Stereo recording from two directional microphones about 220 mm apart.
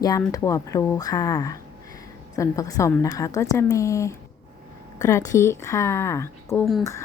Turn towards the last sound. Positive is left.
turn(degrees=0)  # may be behind; listen again after turning